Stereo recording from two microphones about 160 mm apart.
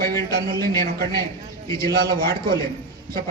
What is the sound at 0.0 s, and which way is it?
A man's voice, 80° right.